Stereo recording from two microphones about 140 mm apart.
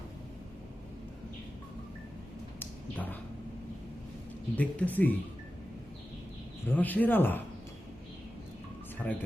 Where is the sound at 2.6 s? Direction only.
10° left (ahead or behind).